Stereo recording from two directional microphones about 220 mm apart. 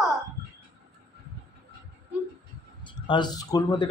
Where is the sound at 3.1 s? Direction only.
20° left (ahead or behind).